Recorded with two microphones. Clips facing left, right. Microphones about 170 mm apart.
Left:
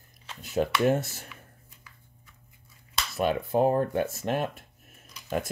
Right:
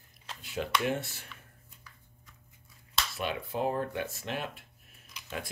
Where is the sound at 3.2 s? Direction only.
45° left (ahead or behind).